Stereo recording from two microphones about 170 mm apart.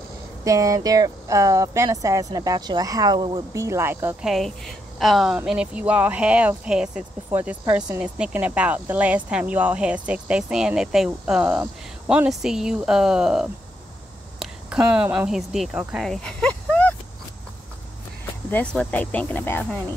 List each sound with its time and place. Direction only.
0.4 s speech: 20° right (ahead or behind)
4.3 s speech: centre (ahead or behind)
16.1 s a sound: 5° left (ahead or behind)
18.5 s speech: 10° left (ahead or behind)